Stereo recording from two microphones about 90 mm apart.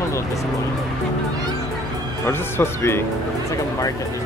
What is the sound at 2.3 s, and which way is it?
Speech, 25° left (ahead or behind).